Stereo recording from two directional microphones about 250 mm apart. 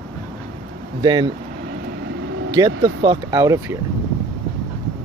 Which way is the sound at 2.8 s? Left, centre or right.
Centre.